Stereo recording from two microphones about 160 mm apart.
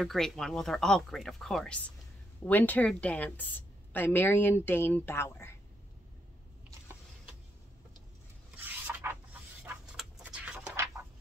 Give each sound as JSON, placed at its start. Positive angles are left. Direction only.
{"t": 0.0, "sound": "a woman's voice", "side_deg": 0}
{"t": 8.6, "sound": "rub", "side_deg": -10}
{"t": 9.9, "sound": "a sound", "side_deg": -5}